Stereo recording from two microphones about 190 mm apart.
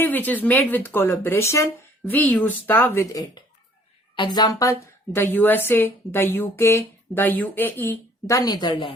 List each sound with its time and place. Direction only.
0.0 s a woman's voice: 10° left (ahead or behind)
5.1 s a woman's voice: 10° left (ahead or behind)